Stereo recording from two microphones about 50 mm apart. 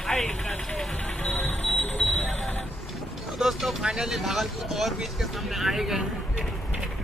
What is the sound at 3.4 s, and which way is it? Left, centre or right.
Speech, centre.